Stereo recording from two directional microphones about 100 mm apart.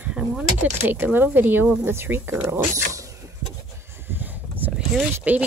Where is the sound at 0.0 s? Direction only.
10° right (ahead or behind).